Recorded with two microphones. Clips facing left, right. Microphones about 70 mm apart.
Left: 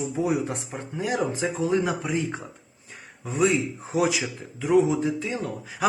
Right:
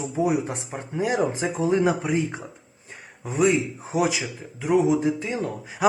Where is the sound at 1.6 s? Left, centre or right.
Right.